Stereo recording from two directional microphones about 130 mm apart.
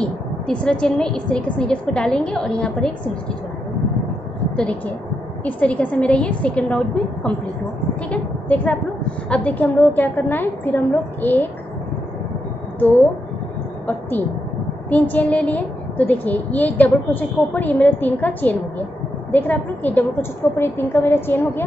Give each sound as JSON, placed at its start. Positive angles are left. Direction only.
{"t": 0.0, "sound": "a woman's voice", "side_deg": 10}
{"t": 5.4, "sound": "a woman's voice", "side_deg": 10}
{"t": 8.1, "sound": "a woman's voice", "side_deg": 10}
{"t": 14.9, "sound": "a woman's voice", "side_deg": 10}